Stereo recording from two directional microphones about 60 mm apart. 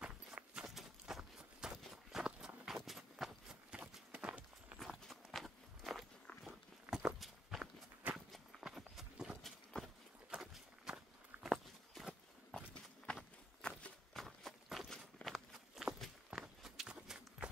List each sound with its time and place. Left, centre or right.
0.0 s horse: centre
0.7 s walk: centre
4.1 s clip-clop: right
4.7 s walk: centre
8.5 s clip-clop: centre
10.3 s horse: centre
10.9 s walk: centre
11.4 s walk: centre
12.5 s walk: centre
14.1 s a sound: centre
15.2 s walk: centre